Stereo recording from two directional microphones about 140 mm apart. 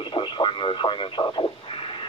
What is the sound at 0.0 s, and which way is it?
Speech, 35° left (ahead or behind).